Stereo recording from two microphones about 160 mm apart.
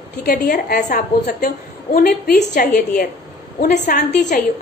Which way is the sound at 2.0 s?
80° left.